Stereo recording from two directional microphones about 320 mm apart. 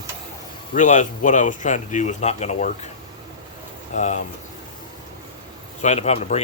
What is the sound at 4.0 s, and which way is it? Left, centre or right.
Speech, left.